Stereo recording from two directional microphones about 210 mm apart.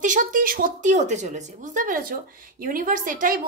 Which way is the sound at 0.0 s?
40° right (ahead or behind).